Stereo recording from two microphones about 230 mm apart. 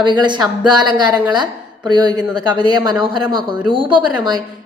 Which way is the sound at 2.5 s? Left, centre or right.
Centre.